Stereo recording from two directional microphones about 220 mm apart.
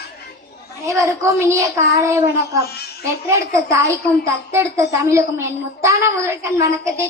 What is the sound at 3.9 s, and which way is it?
A woman's voice, 15° right (ahead or behind).